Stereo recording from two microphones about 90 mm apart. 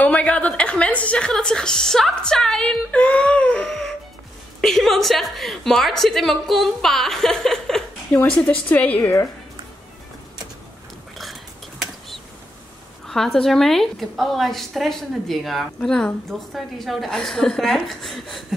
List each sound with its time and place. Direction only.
0.0 s a woman's voice: 15° left (ahead or behind)
13.0 s a woman's voice: 5° left (ahead or behind)